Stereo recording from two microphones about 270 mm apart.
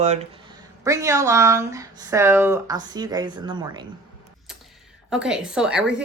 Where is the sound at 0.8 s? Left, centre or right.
Centre.